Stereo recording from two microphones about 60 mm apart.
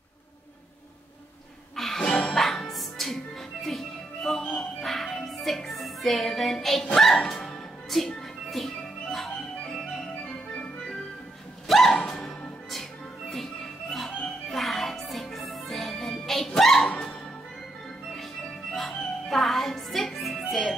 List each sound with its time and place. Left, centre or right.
1.8 s music: centre
2.3 s music: centre
10.2 s music: left
11.6 s music: centre
13.9 s music: centre
18.8 s music: centre